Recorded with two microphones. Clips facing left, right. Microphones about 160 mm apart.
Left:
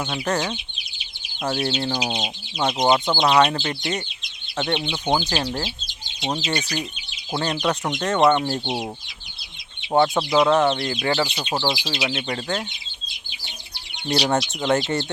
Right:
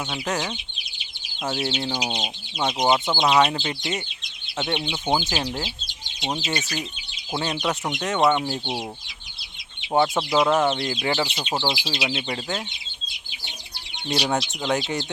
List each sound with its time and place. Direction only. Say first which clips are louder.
0.0 s speech: left 3 dB; centre (ahead or behind)
1.8 s speech: left 2 dB; 10° right (ahead or behind)
2.0 s speech: left 2 dB; centre (ahead or behind)
3.6 s speech: left 2 dB; 15° right (ahead or behind)
8.6 s speech: left 3 dB; 15° left (ahead or behind)
9.9 s speech: left 2 dB; 10° right (ahead or behind)
14.1 s speech: left 3 dB; centre (ahead or behind)